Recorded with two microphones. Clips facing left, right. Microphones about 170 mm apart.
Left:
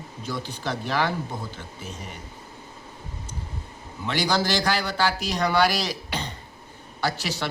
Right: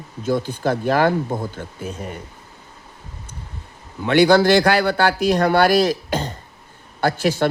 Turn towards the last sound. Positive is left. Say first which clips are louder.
# right 9 dB
turn(degrees=-50)  # may be behind; listen again after turning